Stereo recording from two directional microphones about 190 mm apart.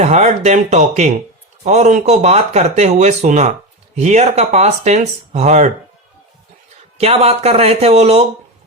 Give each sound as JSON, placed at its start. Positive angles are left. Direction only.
{"t": 0.0, "sound": "speech", "side_deg": -35}
{"t": 7.0, "sound": "speech", "side_deg": -35}